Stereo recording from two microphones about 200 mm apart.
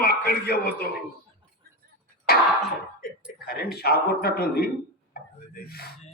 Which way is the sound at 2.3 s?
50° left (ahead or behind).